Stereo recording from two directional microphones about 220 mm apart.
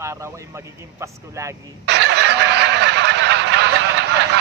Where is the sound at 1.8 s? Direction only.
50° right (ahead or behind).